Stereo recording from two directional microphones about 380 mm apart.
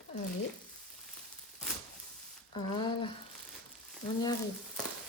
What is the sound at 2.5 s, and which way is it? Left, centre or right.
Speech, centre.